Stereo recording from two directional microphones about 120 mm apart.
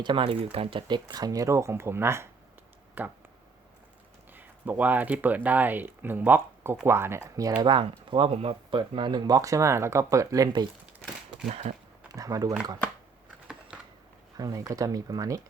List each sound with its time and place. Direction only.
0.0 s speech: 40° right (ahead or behind); by 3.1 s 15° right (ahead or behind)
4.4 s speech: 15° right (ahead or behind)
7.6 s speech: 40° right (ahead or behind)
11.6 s speech: 60° right (ahead or behind)
12.1 s speech: 30° right (ahead or behind)
13.7 s a sound: 10° right (ahead or behind)
14.3 s speech: 30° right (ahead or behind)